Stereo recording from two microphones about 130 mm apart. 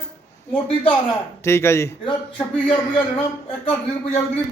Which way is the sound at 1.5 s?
20° left (ahead or behind).